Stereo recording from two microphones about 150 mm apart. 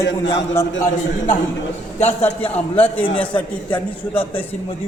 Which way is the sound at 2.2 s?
10° left (ahead or behind).